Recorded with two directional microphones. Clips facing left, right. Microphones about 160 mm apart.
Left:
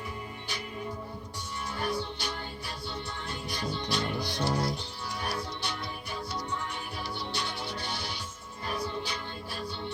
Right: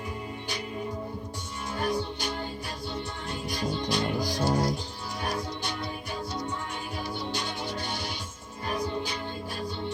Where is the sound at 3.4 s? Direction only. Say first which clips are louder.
Right 4 dB; 40° right (ahead or behind).